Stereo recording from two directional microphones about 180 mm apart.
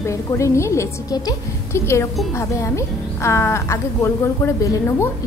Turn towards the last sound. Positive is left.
turn(degrees=15)  # may be behind; listen again after turning